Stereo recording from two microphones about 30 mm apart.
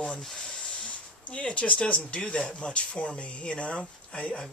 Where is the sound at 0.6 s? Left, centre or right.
Left.